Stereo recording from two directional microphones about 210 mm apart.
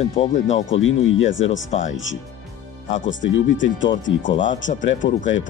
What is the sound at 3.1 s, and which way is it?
Speech, 60° left (ahead or behind).